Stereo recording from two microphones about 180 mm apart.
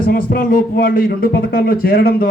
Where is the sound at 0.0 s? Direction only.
55° left (ahead or behind).